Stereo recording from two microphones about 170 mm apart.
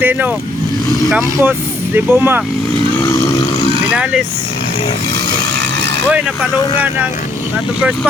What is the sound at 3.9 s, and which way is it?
Vehicle, 5° right (ahead or behind).